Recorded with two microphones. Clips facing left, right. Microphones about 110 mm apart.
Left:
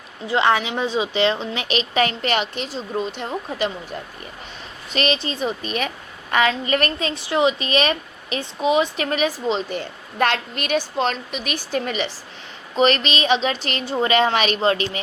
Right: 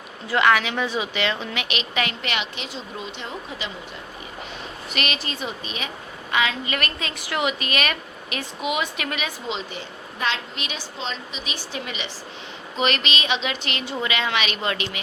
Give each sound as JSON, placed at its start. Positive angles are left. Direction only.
{"t": 0.3, "sound": "a woman's voice", "side_deg": 25}
{"t": 4.9, "sound": "a woman's voice", "side_deg": 30}
{"t": 5.6, "sound": "a woman's voice", "side_deg": 50}